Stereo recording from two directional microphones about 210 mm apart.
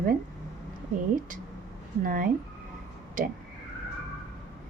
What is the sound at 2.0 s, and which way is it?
Speech, 40° right (ahead or behind).